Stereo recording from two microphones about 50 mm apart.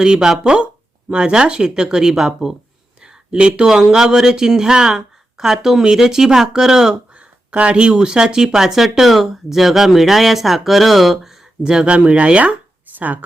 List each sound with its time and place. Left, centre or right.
0.0 s speech: centre
7.5 s speech: right; by 11.3 s centre
11.6 s speech: centre